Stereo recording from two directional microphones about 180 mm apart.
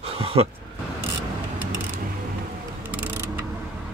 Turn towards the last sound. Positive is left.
turn(degrees=-10)  # may be behind; listen again after turning